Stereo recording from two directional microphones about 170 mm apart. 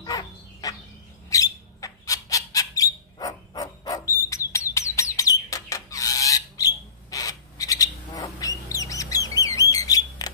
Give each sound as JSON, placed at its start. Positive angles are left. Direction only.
{"t": 0.0, "sound": "dog", "side_deg": 25}
{"t": 1.3, "sound": "bird", "side_deg": 20}